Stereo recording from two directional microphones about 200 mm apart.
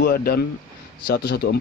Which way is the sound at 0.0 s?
50° left (ahead or behind).